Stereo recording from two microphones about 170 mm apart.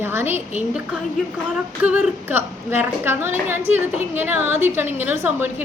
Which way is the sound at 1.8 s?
10° right (ahead or behind).